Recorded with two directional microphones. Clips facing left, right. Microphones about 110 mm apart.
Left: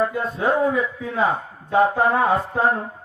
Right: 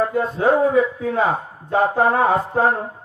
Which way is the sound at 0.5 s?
30° right (ahead or behind).